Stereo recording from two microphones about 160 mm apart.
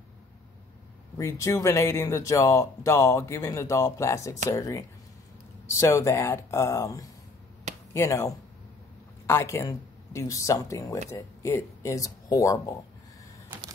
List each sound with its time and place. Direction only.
1.1 s speech: 20° left (ahead or behind)